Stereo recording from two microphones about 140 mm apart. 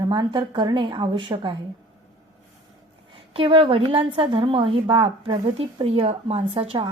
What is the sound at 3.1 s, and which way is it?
A woman's voice, 40° right (ahead or behind).